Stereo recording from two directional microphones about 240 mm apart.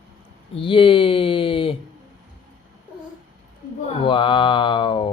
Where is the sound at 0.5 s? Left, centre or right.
Left.